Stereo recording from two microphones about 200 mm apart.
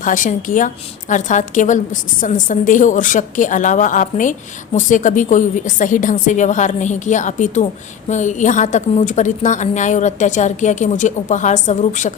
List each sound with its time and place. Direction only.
0.0 s a woman's voice: 40° left (ahead or behind)